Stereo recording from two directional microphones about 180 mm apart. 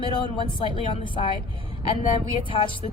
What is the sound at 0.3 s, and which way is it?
Speech, 30° left (ahead or behind).